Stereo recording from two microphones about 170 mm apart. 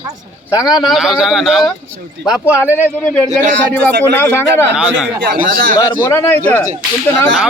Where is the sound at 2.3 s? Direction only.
15° left (ahead or behind).